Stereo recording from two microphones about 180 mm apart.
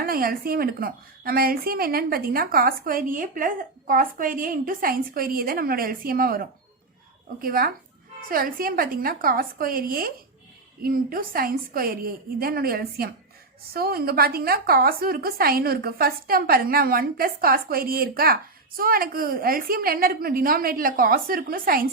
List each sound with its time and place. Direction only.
0.0 s a woman's voice: 55° right (ahead or behind)